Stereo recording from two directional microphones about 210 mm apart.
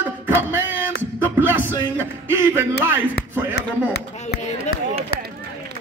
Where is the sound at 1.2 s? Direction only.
10° right (ahead or behind).